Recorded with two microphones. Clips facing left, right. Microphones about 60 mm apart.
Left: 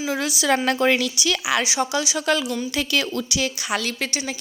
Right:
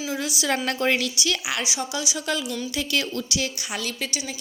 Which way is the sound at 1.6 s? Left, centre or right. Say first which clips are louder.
Left 5 dB; left.